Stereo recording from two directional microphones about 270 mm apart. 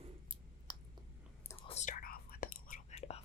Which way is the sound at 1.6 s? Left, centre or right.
Left.